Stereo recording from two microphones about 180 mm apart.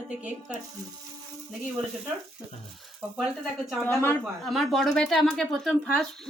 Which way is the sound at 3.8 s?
10° left (ahead or behind).